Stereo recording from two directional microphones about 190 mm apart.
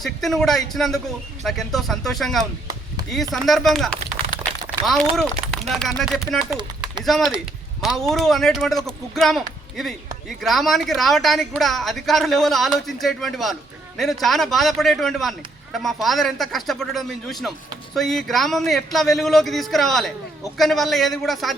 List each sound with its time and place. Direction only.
0.0 s speech: centre (ahead or behind)
6.5 s a sound: 25° right (ahead or behind)
7.0 s speech: centre (ahead or behind)